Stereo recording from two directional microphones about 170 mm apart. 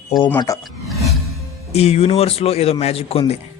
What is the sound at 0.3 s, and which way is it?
Speech, 20° left (ahead or behind).